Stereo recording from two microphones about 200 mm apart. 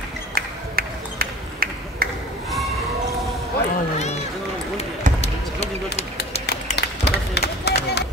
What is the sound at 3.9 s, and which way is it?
Run, 35° left (ahead or behind).